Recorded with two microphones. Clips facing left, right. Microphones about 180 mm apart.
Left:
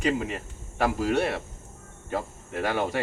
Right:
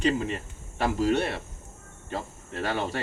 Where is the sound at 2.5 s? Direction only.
15° left (ahead or behind).